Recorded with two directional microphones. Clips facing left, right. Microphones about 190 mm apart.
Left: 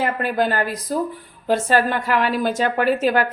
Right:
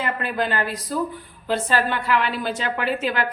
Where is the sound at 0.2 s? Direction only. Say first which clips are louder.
Left 4 dB; 45° left (ahead or behind).